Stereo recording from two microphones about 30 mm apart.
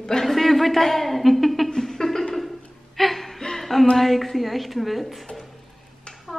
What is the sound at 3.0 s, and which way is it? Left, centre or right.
Gasp, centre.